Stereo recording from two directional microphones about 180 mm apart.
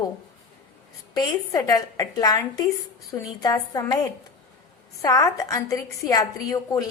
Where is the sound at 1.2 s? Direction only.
20° left (ahead or behind).